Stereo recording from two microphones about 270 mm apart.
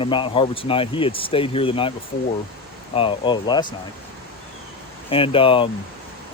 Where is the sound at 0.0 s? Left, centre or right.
Centre.